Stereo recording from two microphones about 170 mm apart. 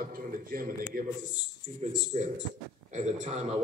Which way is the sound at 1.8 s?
45° right (ahead or behind).